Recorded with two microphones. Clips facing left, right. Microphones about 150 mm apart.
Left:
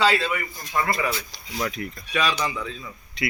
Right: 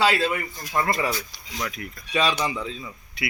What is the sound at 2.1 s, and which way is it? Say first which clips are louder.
Speech: right 1 dB; 20° right (ahead or behind).